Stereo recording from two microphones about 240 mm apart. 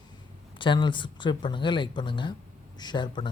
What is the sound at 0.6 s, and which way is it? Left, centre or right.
Speech, centre.